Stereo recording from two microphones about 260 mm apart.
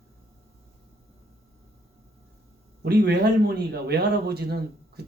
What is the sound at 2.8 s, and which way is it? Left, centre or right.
Speech, right.